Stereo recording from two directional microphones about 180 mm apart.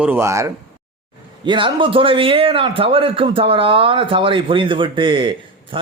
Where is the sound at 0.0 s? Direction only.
10° right (ahead or behind).